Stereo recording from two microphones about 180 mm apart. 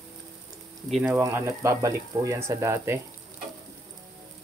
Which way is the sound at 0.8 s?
Centre (ahead or behind).